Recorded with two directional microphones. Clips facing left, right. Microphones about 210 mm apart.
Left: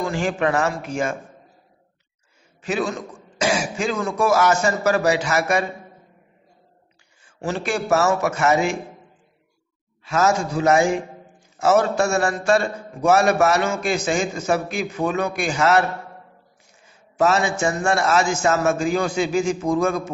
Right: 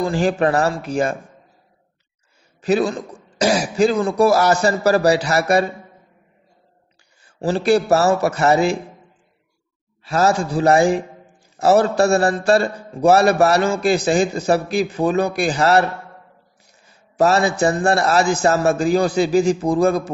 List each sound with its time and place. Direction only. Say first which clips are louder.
0.0 s a man's voice: right 4 dB; 35° right (ahead or behind)
2.6 s a man's voice: right 6 dB; 35° right (ahead or behind)
7.2 s a man's voice: right 8 dB; 35° right (ahead or behind)
10.0 s a man's voice: right 2 dB; 35° right (ahead or behind)
16.8 s a man's voice: right 3 dB; 35° right (ahead or behind)